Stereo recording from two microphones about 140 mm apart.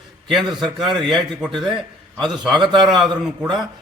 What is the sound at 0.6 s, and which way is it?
A man's voice, centre (ahead or behind).